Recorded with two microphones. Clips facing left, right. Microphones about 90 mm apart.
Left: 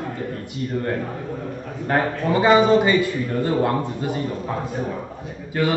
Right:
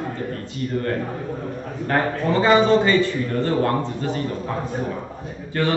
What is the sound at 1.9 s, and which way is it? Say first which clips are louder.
A man's voice: even; 15° left (ahead or behind).